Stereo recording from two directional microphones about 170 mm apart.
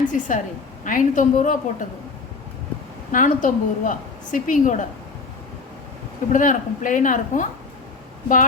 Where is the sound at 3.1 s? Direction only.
50° left (ahead or behind).